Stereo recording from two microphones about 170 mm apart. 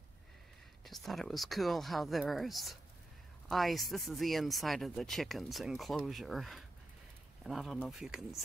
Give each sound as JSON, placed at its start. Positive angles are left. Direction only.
{"t": 0.8, "sound": "speech", "side_deg": 0}